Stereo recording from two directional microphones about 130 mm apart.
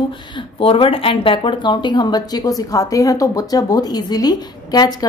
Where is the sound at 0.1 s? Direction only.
40° left (ahead or behind).